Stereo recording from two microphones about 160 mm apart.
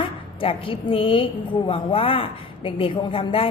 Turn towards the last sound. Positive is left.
turn(degrees=35)  # may be behind; listen again after turning